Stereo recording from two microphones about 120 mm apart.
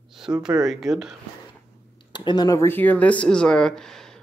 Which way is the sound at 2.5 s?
20° left (ahead or behind).